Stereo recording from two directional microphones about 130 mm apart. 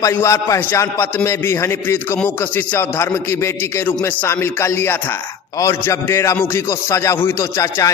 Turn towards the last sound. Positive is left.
turn(degrees=20)  # may be behind; listen again after turning